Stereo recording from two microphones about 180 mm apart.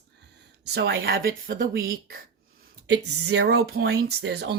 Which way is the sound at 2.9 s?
70° right (ahead or behind).